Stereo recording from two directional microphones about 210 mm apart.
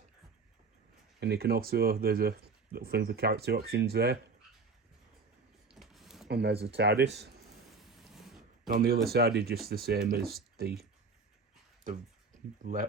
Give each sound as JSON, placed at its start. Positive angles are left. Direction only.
{"t": 1.2, "sound": "speech", "side_deg": -50}
{"t": 5.8, "sound": "a sound", "side_deg": 0}
{"t": 6.2, "sound": "speech", "side_deg": -50}
{"t": 7.8, "sound": "a sound", "side_deg": 0}
{"t": 8.7, "sound": "speech", "side_deg": -45}
{"t": 12.6, "sound": "speech", "side_deg": -40}